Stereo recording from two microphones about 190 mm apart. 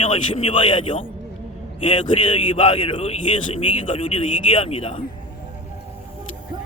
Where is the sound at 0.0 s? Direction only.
25° left (ahead or behind).